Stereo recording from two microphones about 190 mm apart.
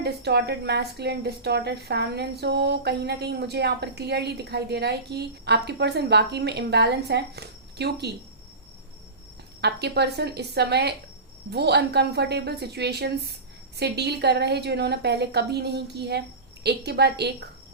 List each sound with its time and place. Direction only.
0.0 s a woman's voice: 60° right (ahead or behind)
9.6 s a woman's voice: 60° right (ahead or behind)